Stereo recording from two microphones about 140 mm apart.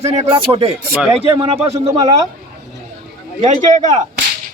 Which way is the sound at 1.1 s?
45° right (ahead or behind).